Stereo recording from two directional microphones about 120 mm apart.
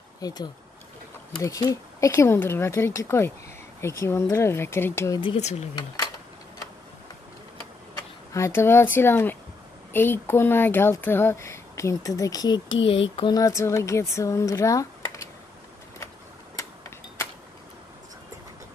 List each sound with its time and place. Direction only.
0.2 s speech: 35° left (ahead or behind)
5.4 s speech: 65° left (ahead or behind)
8.3 s speech: 25° left (ahead or behind); by 13.3 s 50° left (ahead or behind)
13.3 s speech: 25° left (ahead or behind)